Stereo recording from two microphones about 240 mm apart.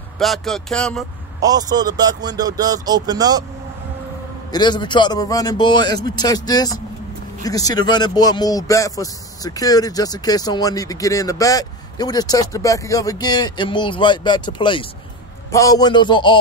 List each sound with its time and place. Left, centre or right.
0.2 s speech: centre
1.4 s speech: centre
4.5 s a man's voice: centre